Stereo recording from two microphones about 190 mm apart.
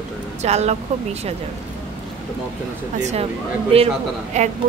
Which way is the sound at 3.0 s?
35° right (ahead or behind).